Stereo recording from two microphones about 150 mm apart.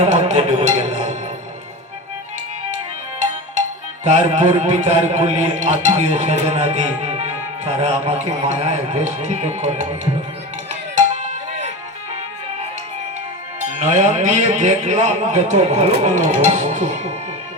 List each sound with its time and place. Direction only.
0.0 s a sound: 45° right (ahead or behind)
4.0 s a man's voice: 50° right (ahead or behind)
10.9 s music: 50° right (ahead or behind)
13.7 s a man's voice: 50° right (ahead or behind)